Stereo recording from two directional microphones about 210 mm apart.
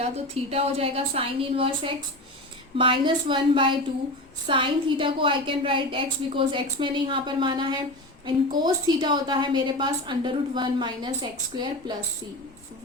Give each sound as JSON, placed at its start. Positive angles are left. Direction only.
{"t": 0.5, "sound": "a woman's voice", "side_deg": -30}